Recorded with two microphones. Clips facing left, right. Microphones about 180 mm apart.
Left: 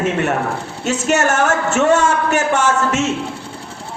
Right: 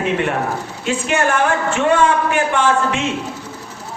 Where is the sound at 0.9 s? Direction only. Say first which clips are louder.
Left 1 dB; 45° left (ahead or behind).